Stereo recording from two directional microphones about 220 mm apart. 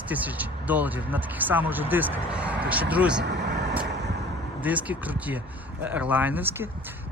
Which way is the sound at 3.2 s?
50° right (ahead or behind).